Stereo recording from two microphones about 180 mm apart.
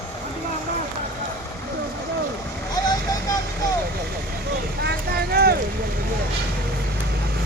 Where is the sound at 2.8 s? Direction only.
20° left (ahead or behind).